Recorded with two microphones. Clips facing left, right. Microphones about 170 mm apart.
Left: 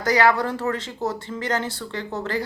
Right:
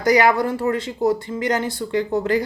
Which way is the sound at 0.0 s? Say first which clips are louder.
Right 3 dB; 15° right (ahead or behind).